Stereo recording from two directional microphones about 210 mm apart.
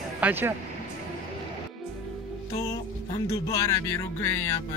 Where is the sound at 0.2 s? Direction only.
10° right (ahead or behind).